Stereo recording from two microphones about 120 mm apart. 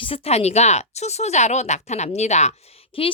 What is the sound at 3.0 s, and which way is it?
Speech, 50° left (ahead or behind).